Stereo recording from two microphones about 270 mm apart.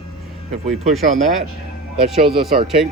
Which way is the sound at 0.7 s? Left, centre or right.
Centre.